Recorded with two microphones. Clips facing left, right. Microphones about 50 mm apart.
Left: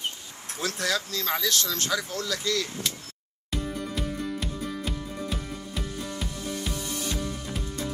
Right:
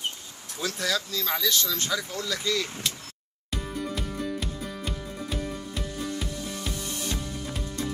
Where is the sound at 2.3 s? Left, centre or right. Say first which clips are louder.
Right 1 dB; right.